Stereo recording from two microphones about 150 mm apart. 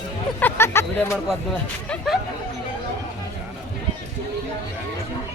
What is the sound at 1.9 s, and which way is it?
Music, centre (ahead or behind).